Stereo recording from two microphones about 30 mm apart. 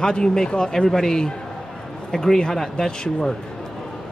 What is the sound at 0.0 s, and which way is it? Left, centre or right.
Speech, left.